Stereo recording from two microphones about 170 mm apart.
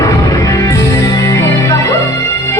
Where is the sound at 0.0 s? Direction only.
20° left (ahead or behind).